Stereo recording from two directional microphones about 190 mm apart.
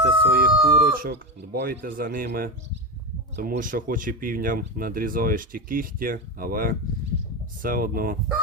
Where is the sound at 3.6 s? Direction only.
45° right (ahead or behind).